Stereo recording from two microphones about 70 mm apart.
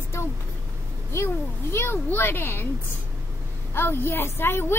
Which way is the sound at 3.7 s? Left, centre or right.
Left.